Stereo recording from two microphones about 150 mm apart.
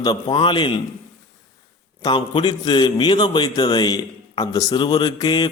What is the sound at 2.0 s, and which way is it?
A man's voice, 30° left (ahead or behind).